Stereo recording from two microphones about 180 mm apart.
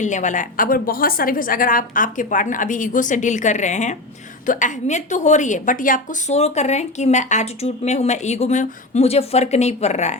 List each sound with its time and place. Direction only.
0.0 s a woman's voice: 45° left (ahead or behind)